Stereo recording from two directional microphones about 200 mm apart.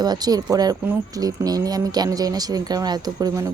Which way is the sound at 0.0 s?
20° right (ahead or behind).